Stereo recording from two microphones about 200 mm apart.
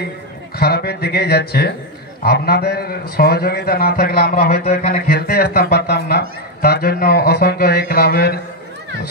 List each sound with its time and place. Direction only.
0.6 s speech: 55° left (ahead or behind)
4.6 s speech: 35° left (ahead or behind)
5.1 s speech: 50° left (ahead or behind)